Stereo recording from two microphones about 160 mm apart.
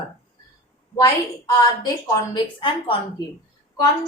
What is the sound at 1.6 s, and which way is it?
A woman's voice, 25° left (ahead or behind).